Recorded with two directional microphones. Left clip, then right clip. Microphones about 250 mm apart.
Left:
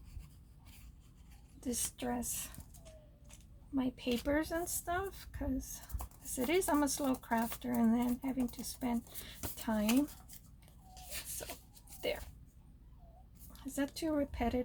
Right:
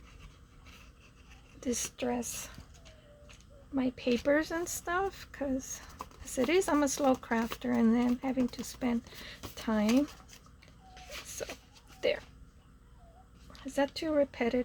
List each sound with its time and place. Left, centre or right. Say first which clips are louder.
1.6 s speech: right 6 dB; right
3.8 s speech: right 5 dB; right
12.0 s speech: right 7 dB; right
13.5 s speech: right 8 dB; right